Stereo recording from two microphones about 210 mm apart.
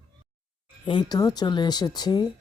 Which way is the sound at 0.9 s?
20° left (ahead or behind).